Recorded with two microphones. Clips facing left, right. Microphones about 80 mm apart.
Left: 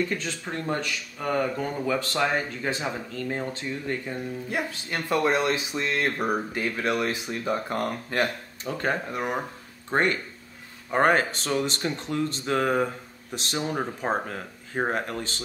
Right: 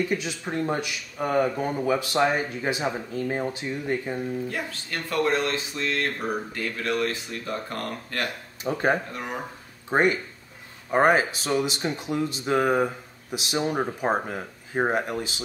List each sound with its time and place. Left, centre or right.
0.1 s speech: centre
4.5 s speech: centre
8.7 s speech: centre